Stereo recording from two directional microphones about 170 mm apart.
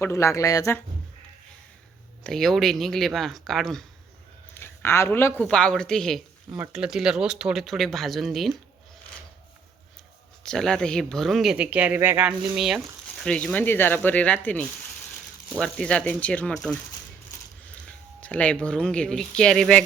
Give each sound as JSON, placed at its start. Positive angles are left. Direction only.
{"t": 0.0, "sound": "speech", "side_deg": 15}
{"t": 2.2, "sound": "speech", "side_deg": 0}
{"t": 4.5, "sound": "a sound", "side_deg": 15}
{"t": 5.4, "sound": "speech", "side_deg": 5}
{"t": 10.4, "sound": "speech", "side_deg": 5}
{"t": 17.8, "sound": "speech", "side_deg": 10}